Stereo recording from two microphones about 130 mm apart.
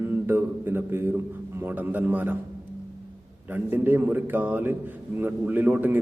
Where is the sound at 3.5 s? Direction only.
15° right (ahead or behind).